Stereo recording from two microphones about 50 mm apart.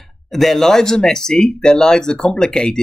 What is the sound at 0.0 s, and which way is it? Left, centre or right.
Speech, centre.